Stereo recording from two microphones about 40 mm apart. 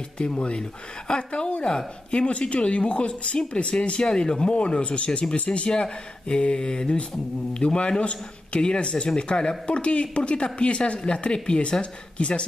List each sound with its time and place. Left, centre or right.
0.2 s speech: left